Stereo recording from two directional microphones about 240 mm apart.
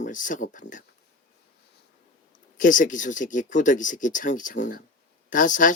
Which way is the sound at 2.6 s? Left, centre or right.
Left.